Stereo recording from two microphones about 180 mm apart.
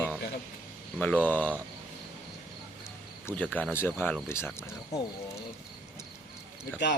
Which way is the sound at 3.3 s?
10° left (ahead or behind).